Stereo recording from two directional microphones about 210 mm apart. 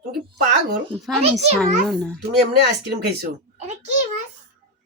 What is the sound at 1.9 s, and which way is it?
Speech, centre (ahead or behind).